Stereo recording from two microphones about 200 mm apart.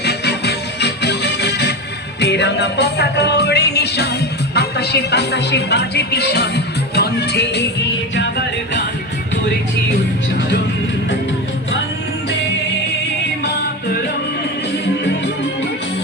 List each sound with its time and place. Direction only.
0.0 s music: 55° left (ahead or behind)
13.4 s music: 50° left (ahead or behind)